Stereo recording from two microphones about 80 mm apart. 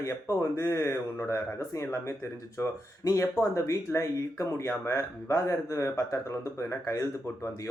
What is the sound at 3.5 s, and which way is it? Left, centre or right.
Speech, left.